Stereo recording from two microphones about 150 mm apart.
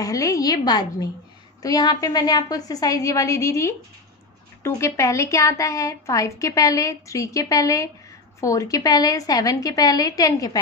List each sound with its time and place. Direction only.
0.0 s a woman's voice: 20° left (ahead or behind)